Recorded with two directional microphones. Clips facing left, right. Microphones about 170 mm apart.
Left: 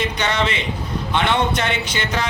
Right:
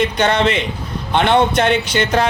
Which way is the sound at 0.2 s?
55° right (ahead or behind).